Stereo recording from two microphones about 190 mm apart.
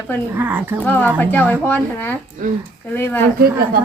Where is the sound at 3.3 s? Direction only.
50° right (ahead or behind).